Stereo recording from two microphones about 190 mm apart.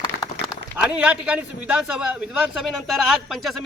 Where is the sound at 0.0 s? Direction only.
20° left (ahead or behind).